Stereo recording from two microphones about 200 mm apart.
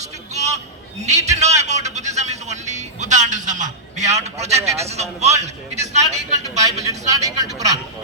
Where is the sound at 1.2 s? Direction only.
35° right (ahead or behind).